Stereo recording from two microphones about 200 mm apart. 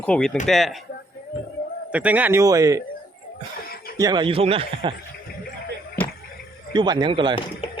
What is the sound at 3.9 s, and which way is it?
A man's voice, 20° right (ahead or behind).